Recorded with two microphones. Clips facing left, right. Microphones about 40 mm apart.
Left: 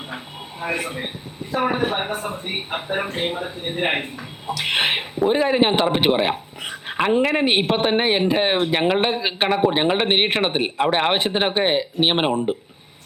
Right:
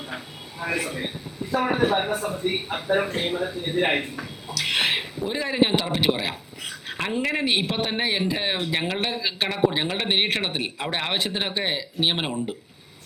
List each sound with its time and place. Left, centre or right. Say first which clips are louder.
0.6 s speech: left 2 dB; left